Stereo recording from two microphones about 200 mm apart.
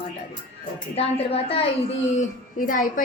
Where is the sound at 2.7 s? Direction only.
45° left (ahead or behind).